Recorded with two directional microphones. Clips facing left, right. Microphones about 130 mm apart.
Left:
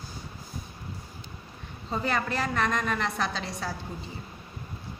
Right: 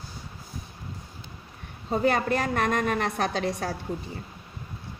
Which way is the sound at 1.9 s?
45° right (ahead or behind).